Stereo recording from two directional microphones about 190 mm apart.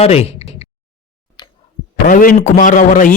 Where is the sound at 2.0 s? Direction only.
45° left (ahead or behind).